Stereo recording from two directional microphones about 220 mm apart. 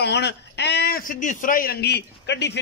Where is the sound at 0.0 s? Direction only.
50° left (ahead or behind).